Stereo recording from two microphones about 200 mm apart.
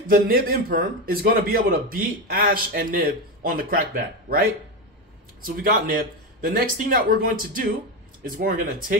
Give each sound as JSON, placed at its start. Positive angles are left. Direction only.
{"t": 0.0, "sound": "a man's voice", "side_deg": -45}